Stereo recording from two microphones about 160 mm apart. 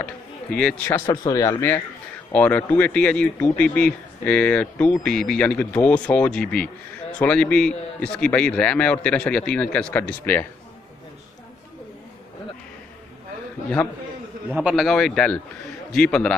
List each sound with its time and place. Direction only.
0.0 s a man's voice: 5° left (ahead or behind)
13.8 s a man's voice: 10° left (ahead or behind)
14.5 s a man's voice: 5° right (ahead or behind)